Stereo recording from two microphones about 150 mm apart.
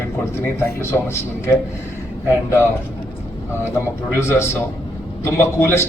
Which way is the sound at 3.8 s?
15° left (ahead or behind).